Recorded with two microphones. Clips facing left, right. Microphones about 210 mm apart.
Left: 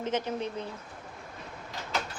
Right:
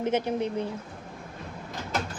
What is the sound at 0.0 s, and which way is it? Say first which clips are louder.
Speech: right 5 dB; 15° right (ahead or behind).